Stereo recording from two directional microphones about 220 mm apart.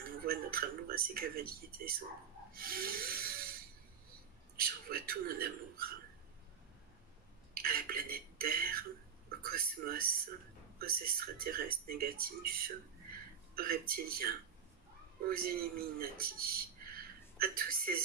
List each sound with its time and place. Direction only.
0.3 s speech: 45° right (ahead or behind)
2.5 s snort: 40° right (ahead or behind)
4.6 s speech: 40° right (ahead or behind)
7.5 s a sound: 40° right (ahead or behind)
9.4 s speech: 40° right (ahead or behind)